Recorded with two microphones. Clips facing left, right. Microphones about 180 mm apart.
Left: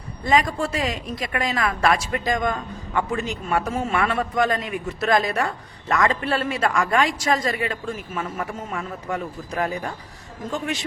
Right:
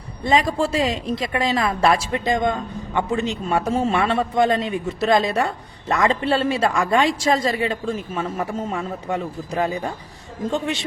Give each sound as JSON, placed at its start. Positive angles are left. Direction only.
{"t": 0.3, "sound": "a woman's voice", "side_deg": -30}